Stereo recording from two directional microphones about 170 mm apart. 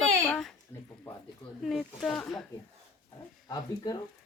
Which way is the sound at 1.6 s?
Centre (ahead or behind).